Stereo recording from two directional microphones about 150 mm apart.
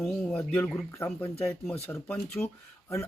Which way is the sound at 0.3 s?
15° left (ahead or behind).